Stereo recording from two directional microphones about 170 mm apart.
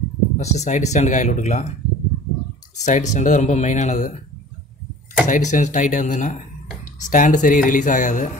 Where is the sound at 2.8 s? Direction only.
45° left (ahead or behind).